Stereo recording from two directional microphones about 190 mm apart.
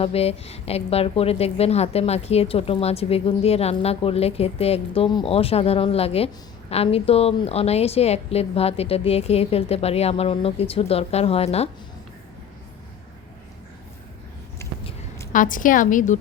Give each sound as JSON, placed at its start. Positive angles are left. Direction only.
{"t": 0.0, "sound": "a woman's voice", "side_deg": 30}
{"t": 14.6, "sound": "a sound", "side_deg": 15}
{"t": 15.3, "sound": "a woman's voice", "side_deg": 45}